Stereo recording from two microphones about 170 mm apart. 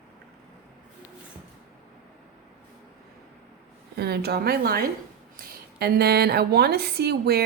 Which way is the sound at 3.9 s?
70° right (ahead or behind).